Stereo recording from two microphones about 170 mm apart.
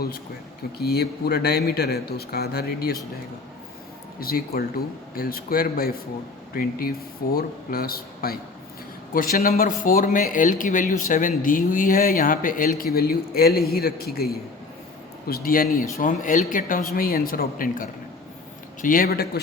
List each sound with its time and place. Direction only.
0.8 s speech: 65° left (ahead or behind)
4.2 s speech: 60° left (ahead or behind)